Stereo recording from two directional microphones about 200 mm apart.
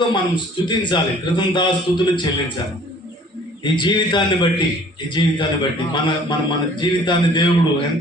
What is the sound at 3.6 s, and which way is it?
A man's voice, 25° left (ahead or behind).